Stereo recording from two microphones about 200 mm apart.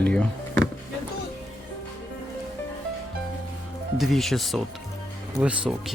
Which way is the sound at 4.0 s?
Centre (ahead or behind).